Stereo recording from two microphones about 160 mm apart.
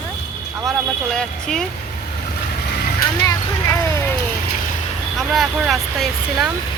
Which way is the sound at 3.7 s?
15° left (ahead or behind).